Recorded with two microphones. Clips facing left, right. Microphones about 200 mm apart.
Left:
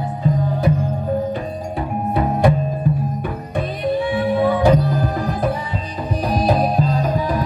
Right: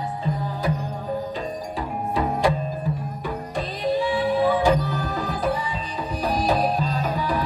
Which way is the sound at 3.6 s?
60° left (ahead or behind).